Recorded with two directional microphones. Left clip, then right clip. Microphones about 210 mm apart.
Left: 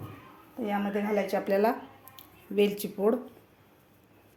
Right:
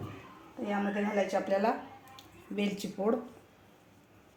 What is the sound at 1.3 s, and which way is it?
Speech, 35° left (ahead or behind).